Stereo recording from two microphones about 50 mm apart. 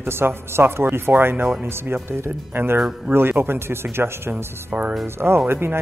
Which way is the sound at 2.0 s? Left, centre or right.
Right.